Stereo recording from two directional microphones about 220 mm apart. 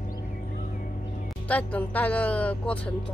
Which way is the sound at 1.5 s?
5° left (ahead or behind).